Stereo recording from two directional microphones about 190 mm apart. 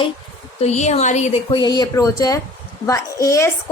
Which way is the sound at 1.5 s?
20° left (ahead or behind).